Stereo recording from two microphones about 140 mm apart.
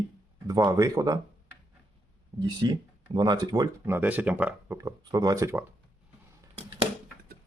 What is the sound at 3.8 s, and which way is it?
Speech, 15° right (ahead or behind).